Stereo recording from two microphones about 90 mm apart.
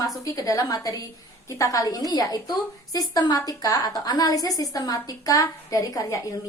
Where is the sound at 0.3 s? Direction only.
40° left (ahead or behind).